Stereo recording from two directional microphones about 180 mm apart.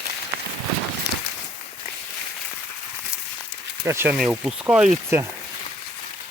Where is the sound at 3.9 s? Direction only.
15° right (ahead or behind).